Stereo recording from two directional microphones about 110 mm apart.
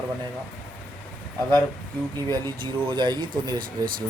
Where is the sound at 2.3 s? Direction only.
45° right (ahead or behind).